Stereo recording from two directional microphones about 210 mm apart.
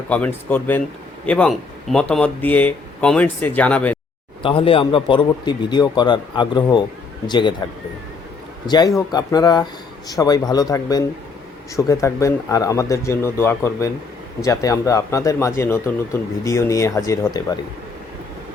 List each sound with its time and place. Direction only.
0.1 s speech: 5° left (ahead or behind)
4.4 s a man's voice: 25° left (ahead or behind)
8.6 s a man's voice: 20° left (ahead or behind)